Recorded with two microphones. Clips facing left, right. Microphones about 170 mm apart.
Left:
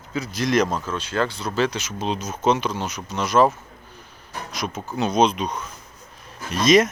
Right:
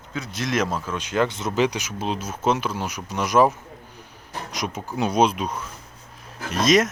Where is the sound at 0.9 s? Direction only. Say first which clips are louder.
Right 4 dB; 15° right (ahead or behind).